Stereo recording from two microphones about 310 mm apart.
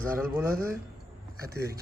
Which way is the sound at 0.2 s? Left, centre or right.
Centre.